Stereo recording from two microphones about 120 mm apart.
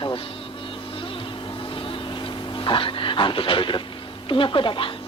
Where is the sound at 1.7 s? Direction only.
45° left (ahead or behind).